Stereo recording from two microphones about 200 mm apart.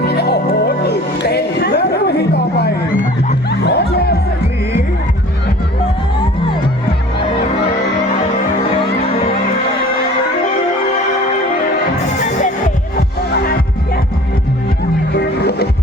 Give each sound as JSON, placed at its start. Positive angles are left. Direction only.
{"t": 0.0, "sound": "music", "side_deg": 55}
{"t": 13.3, "sound": "music", "side_deg": 50}
{"t": 15.1, "sound": "music", "side_deg": 55}